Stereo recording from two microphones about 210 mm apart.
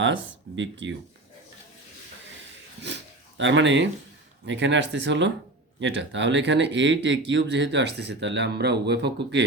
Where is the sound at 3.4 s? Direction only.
60° right (ahead or behind).